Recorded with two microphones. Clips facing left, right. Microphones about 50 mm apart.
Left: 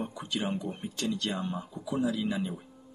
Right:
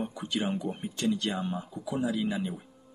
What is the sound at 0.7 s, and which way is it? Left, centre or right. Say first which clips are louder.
Speech: right 3 dB; centre.